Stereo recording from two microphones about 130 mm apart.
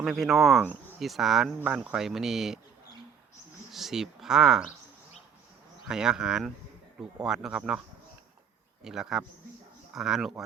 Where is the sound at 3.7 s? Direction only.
Centre (ahead or behind).